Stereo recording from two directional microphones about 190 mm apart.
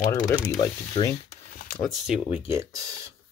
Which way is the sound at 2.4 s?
15° right (ahead or behind).